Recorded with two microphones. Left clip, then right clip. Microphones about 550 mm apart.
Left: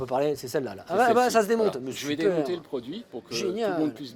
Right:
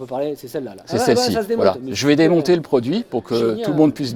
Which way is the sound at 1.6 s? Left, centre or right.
Right.